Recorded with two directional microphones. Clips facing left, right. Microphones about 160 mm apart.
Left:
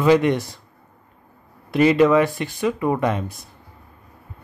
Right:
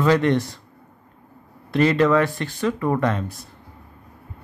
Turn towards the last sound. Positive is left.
turn(degrees=15)  # may be behind; listen again after turning